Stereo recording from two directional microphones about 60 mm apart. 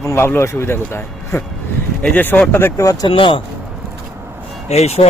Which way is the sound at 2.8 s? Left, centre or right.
Left.